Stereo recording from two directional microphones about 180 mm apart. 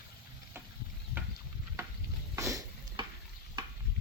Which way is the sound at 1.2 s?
10° right (ahead or behind).